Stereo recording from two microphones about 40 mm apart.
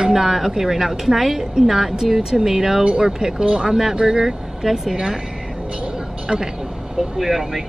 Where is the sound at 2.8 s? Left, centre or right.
Right.